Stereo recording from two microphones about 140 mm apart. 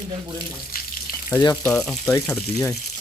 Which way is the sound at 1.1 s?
90° left.